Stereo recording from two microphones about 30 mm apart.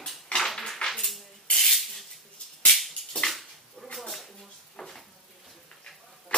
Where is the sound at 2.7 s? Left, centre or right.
Centre.